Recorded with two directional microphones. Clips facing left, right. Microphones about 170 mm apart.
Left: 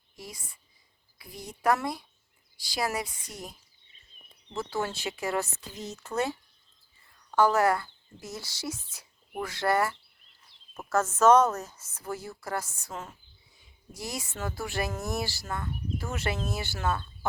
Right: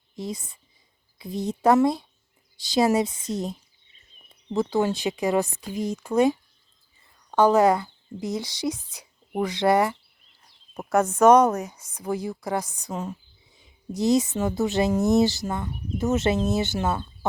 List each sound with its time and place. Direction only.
0.2 s speech: 20° right (ahead or behind)
4.5 s a woman's voice: 15° right (ahead or behind)